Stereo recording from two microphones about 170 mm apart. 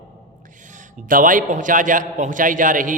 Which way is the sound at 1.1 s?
50° right (ahead or behind).